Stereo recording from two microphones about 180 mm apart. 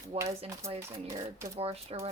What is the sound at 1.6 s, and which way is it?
Speech, 35° right (ahead or behind).